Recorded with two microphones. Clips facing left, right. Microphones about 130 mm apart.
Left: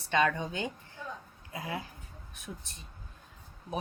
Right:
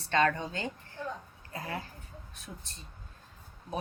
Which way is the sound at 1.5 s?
10° left (ahead or behind).